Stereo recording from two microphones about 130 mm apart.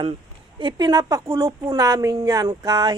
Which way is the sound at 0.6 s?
30° right (ahead or behind).